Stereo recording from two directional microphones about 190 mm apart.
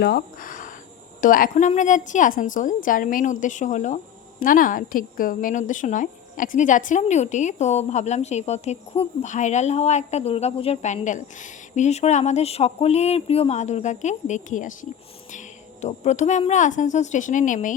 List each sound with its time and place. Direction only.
0.0 s a woman's voice: 55° left (ahead or behind)